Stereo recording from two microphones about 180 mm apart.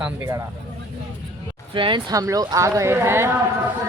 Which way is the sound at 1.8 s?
25° right (ahead or behind).